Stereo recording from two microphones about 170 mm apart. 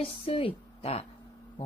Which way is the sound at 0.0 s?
30° left (ahead or behind).